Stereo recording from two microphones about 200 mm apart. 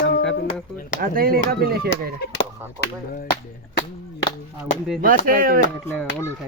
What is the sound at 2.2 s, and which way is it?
Speech, 60° left (ahead or behind).